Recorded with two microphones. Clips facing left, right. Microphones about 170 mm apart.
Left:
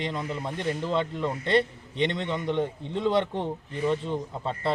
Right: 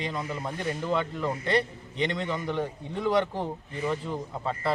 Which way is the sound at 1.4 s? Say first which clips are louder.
Left 5 dB; 25° left (ahead or behind).